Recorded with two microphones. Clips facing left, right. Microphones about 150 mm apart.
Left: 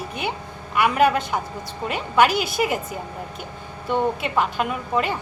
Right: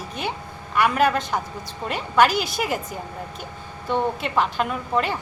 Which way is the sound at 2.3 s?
50° left (ahead or behind).